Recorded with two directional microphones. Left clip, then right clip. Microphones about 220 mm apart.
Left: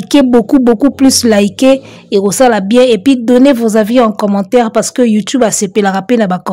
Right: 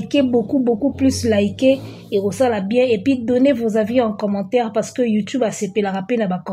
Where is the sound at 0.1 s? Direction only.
45° left (ahead or behind).